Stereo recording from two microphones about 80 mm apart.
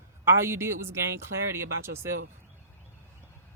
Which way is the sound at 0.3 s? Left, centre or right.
Right.